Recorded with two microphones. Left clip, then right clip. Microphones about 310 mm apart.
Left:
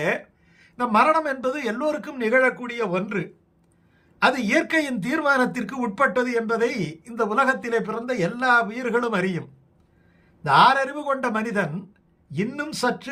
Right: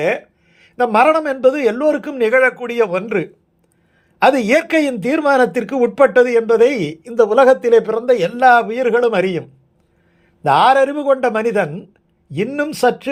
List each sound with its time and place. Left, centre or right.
0.0 s speech: centre
10.4 s speech: centre